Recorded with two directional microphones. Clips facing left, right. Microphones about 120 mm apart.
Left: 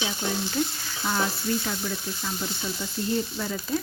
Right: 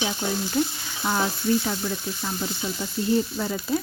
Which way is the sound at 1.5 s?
20° right (ahead or behind).